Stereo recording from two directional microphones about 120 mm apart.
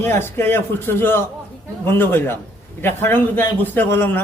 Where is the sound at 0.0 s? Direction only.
20° left (ahead or behind).